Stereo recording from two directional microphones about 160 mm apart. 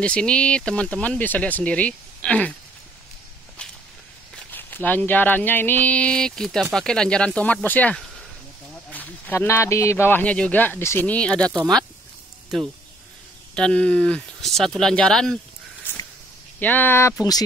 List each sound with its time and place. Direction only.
0.0 s speech: 5° left (ahead or behind)
4.4 s speech: 10° left (ahead or behind)
13.6 s speech: 5° left (ahead or behind)
16.5 s speech: 10° left (ahead or behind)